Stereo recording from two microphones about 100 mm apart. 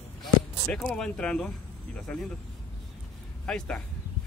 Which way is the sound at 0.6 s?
10° left (ahead or behind).